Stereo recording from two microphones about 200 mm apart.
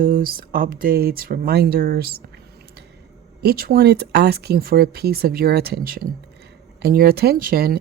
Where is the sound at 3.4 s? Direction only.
50° right (ahead or behind).